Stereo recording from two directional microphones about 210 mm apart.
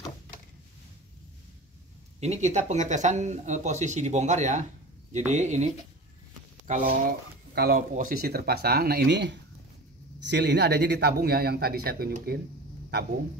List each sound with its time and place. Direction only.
2.1 s speech: 30° right (ahead or behind)
6.7 s speech: 40° right (ahead or behind)